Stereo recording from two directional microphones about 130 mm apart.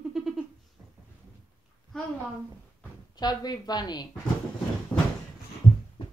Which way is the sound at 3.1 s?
30° left (ahead or behind).